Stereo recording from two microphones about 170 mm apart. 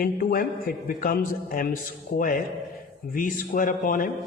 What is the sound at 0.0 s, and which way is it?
A man's voice, 60° left (ahead or behind).